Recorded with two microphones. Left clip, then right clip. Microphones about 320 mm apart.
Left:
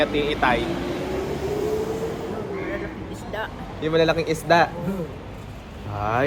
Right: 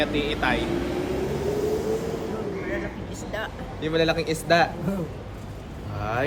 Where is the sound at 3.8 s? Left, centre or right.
Centre.